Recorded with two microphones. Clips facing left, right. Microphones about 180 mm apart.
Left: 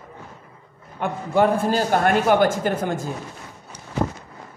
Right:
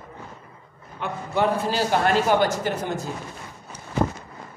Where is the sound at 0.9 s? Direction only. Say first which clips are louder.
Left 5 dB; 50° left (ahead or behind).